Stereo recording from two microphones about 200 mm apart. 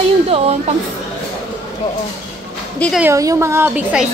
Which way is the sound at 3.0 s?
15° right (ahead or behind).